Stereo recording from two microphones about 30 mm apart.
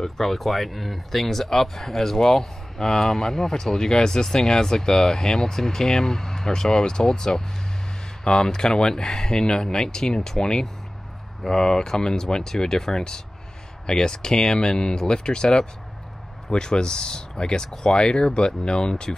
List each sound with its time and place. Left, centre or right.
0.0 s speech: centre
8.5 s speech: left